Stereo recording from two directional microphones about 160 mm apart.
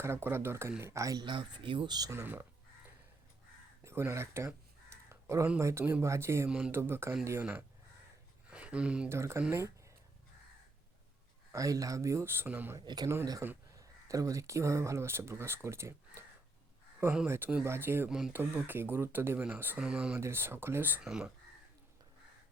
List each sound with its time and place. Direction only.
0.0 s speech: 15° right (ahead or behind)
3.8 s speech: 15° right (ahead or behind)
8.4 s a sound: 5° right (ahead or behind)
9.1 s speech: 15° right (ahead or behind)
11.5 s speech: 20° right (ahead or behind)
12.8 s speech: 25° right (ahead or behind); by 21.3 s 5° right (ahead or behind)